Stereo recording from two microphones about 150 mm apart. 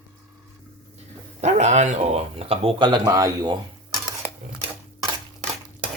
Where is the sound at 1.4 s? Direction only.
50° right (ahead or behind); by 3.5 s 25° right (ahead or behind).